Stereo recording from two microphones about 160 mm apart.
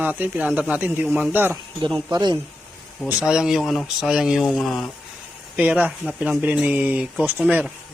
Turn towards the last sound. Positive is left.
turn(degrees=-10)  # may be behind; listen again after turning